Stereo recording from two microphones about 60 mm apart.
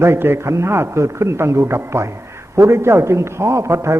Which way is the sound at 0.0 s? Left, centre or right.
Right.